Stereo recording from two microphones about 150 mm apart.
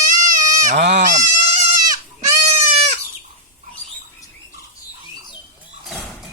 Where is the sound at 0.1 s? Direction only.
55° right (ahead or behind).